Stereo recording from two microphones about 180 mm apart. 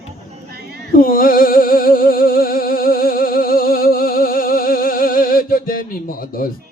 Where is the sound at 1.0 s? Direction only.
50° left (ahead or behind).